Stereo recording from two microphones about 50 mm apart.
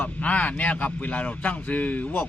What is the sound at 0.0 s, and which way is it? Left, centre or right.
Speech, left.